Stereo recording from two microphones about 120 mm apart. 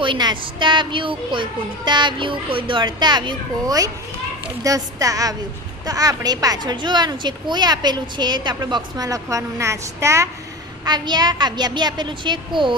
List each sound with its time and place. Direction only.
0.0 s a woman's voice: 40° right (ahead or behind); by 10.2 s 25° right (ahead or behind)
10.8 s speech: 35° right (ahead or behind)